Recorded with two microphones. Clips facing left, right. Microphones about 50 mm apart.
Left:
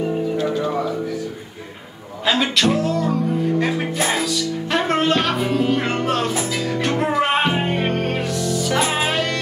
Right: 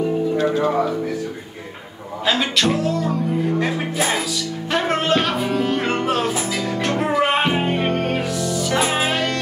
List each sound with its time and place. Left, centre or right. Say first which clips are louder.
2.2 s music: left 1 dB; centre